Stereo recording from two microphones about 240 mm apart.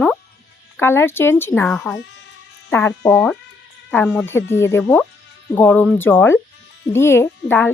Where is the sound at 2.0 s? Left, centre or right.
Left.